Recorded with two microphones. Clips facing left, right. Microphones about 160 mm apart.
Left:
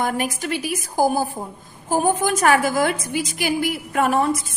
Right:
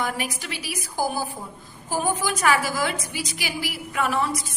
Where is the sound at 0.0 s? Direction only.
50° left (ahead or behind).